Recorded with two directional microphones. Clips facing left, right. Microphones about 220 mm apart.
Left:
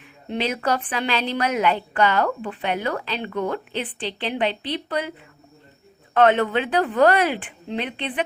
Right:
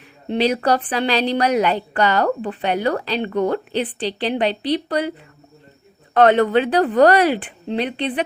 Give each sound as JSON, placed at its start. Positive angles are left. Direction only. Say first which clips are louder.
{"t": 0.3, "sound": "a woman's voice", "louder": "right 6 dB", "side_deg": -35}
{"t": 6.1, "sound": "a woman's voice", "louder": "right 4 dB", "side_deg": -40}